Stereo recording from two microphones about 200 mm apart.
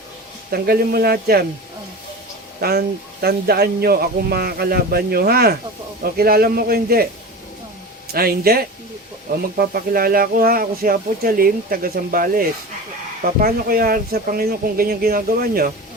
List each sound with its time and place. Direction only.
0.5 s speech: 50° right (ahead or behind)
2.6 s speech: 50° right (ahead or behind)
8.1 s speech: 50° right (ahead or behind)